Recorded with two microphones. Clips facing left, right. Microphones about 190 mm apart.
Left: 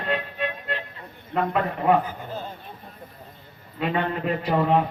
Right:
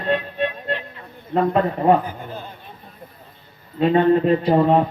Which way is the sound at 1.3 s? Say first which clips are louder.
Right 6 dB; 35° right (ahead or behind).